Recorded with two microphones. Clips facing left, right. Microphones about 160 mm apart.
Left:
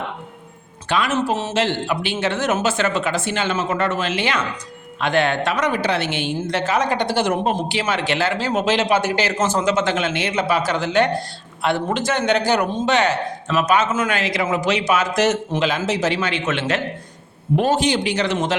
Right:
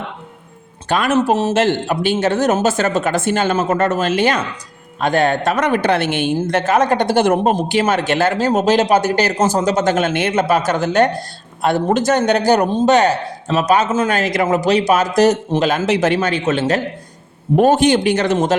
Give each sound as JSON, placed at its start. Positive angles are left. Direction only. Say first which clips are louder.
{"t": 0.9, "sound": "a woman's voice", "louder": "right 5 dB", "side_deg": -50}
{"t": 5.6, "sound": "a woman's voice", "louder": "right 5 dB", "side_deg": -55}
{"t": 15.9, "sound": "a man's voice", "louder": "right 5 dB", "side_deg": -55}
{"t": 17.6, "sound": "a woman's voice", "louder": "right 7 dB", "side_deg": -50}